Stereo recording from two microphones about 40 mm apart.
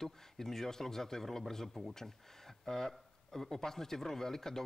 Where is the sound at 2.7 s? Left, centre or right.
Centre.